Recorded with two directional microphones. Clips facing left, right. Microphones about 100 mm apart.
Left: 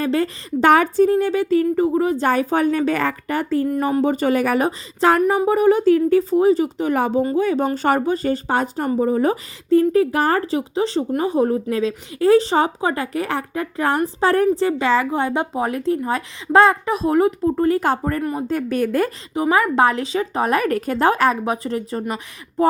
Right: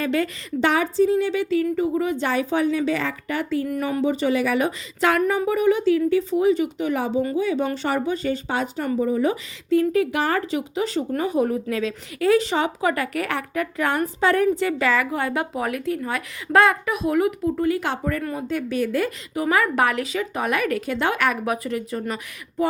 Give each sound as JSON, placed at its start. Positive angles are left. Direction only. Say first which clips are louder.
{"t": 0.0, "sound": "speech", "louder": "left 3 dB", "side_deg": 35}
{"t": 0.7, "sound": "a woman's voice", "louder": "left 5 dB", "side_deg": 55}
{"t": 18.2, "sound": "speech", "louder": "left 5 dB", "side_deg": 20}
{"t": 18.4, "sound": "a woman's voice", "louder": "left 2 dB", "side_deg": 45}
{"t": 19.3, "sound": "speech", "louder": "left 3 dB", "side_deg": 25}